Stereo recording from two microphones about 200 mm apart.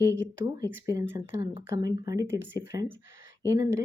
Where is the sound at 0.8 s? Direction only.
10° right (ahead or behind).